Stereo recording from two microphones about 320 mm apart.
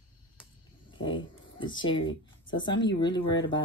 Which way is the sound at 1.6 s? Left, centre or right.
Centre.